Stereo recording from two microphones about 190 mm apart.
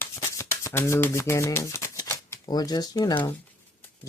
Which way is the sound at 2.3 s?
20° left (ahead or behind).